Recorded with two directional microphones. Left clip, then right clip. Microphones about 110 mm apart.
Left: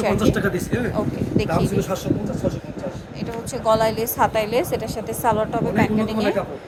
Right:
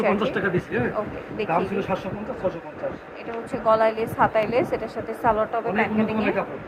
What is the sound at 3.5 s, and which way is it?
A woman's voice, 90° left.